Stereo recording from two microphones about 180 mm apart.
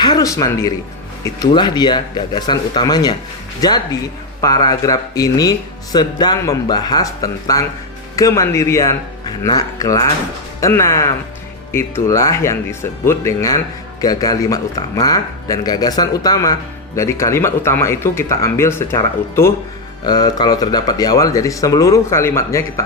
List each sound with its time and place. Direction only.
0.0 s a man's voice: 20° left (ahead or behind)